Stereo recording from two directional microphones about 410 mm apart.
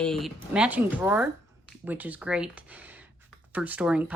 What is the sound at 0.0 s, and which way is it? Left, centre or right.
Speech, centre.